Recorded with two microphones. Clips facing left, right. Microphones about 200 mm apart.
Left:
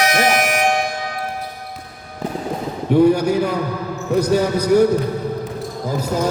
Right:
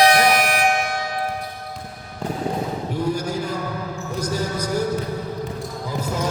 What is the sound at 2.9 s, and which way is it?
Speech, 65° left (ahead or behind).